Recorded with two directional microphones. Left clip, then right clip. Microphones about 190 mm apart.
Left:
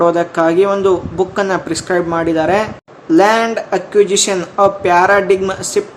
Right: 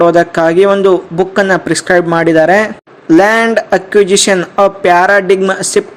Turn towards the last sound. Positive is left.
turn(degrees=-35)  # may be behind; listen again after turning